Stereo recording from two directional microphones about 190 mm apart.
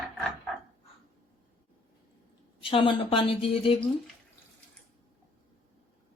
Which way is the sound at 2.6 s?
25° left (ahead or behind).